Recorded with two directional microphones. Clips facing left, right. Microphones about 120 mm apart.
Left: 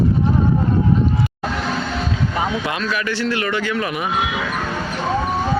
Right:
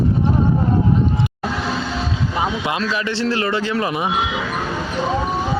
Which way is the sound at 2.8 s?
30° right (ahead or behind).